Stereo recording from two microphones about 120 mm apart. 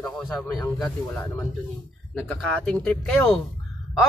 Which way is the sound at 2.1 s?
10° left (ahead or behind).